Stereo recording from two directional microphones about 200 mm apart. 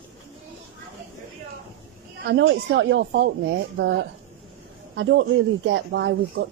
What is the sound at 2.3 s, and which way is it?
Speech, 60° right (ahead or behind).